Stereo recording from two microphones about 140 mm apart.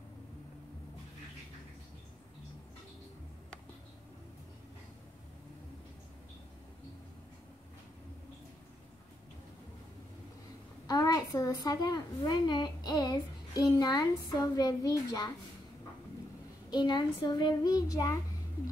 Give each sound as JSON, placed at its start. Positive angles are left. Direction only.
{"t": 10.9, "sound": "a woman's voice", "side_deg": 25}
{"t": 16.7, "sound": "a woman's voice", "side_deg": 30}